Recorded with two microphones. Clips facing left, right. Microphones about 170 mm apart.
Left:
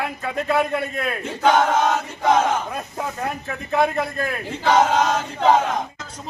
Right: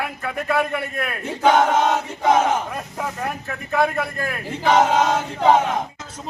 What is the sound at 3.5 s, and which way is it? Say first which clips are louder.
A man's voice: left 1 dB; centre (ahead or behind).